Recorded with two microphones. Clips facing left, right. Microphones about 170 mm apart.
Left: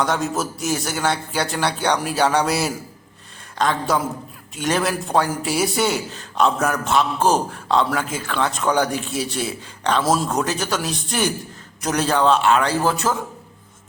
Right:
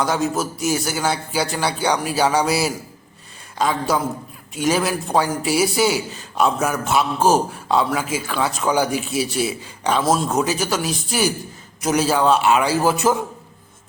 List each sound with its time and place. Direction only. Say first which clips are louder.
0.0 s a man's voice: right 1 dB; centre (ahead or behind)